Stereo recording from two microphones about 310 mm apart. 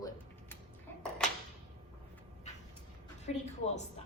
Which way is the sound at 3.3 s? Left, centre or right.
Left.